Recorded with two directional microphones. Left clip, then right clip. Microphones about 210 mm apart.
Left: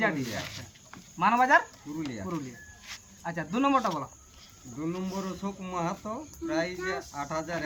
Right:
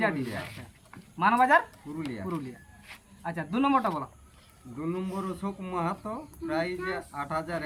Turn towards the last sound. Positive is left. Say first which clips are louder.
# right 1 dB
turn(degrees=-10)  # may be behind; listen again after turning